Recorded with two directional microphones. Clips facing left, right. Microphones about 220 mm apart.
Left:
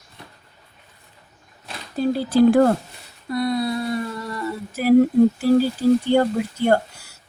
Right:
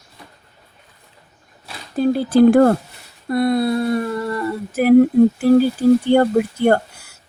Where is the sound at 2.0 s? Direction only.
55° right (ahead or behind).